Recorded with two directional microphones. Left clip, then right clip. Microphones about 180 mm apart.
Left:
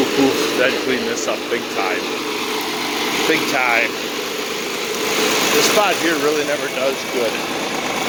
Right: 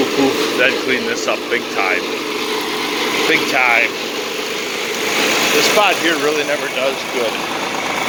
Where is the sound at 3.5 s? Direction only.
25° left (ahead or behind).